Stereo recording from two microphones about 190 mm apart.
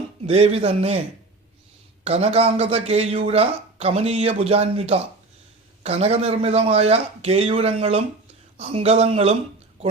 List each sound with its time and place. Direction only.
0.3 s speech: 30° right (ahead or behind)
2.0 s speech: 35° right (ahead or behind)